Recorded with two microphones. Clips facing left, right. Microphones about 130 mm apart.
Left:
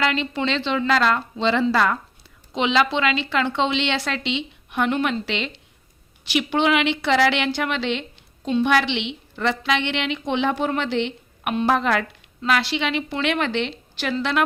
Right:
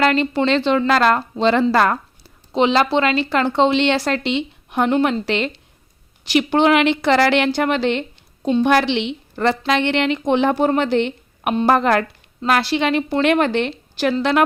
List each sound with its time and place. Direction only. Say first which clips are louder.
0.0 s a woman's voice: right 6 dB; 45° right (ahead or behind)
2.5 s a woman's voice: right 4 dB; 40° right (ahead or behind)